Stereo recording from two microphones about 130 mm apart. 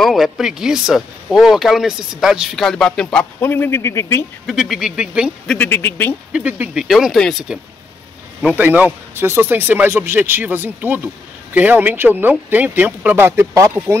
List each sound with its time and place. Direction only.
0.0 s speech: centre (ahead or behind)
3.3 s speech: 15° left (ahead or behind)
4.5 s speech: centre (ahead or behind)
5.5 s speech: 15° left (ahead or behind)
6.3 s speech: 10° right (ahead or behind)
8.4 s a man's voice: 10° right (ahead or behind)